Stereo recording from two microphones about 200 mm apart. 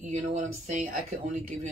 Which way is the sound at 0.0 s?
35° right (ahead or behind).